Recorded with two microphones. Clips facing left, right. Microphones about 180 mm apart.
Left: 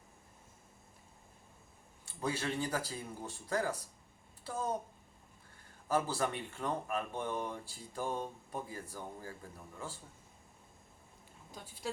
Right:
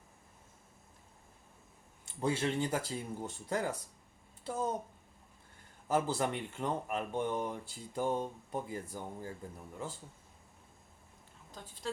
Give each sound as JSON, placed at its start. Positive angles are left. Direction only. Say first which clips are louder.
{"t": 2.0, "sound": "speech", "louder": "right 4 dB", "side_deg": -25}
{"t": 4.4, "sound": "a sound", "louder": "right 3 dB", "side_deg": -20}
{"t": 5.9, "sound": "speech", "louder": "right 2 dB", "side_deg": -20}
{"t": 11.5, "sound": "speech", "louder": "left 1 dB", "side_deg": 10}